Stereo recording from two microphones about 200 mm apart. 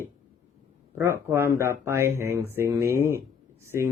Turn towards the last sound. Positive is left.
turn(degrees=-15)  # may be behind; listen again after turning